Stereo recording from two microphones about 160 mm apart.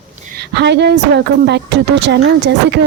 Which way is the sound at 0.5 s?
90° right.